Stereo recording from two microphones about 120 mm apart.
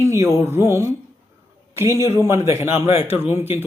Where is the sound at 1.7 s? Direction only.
25° right (ahead or behind).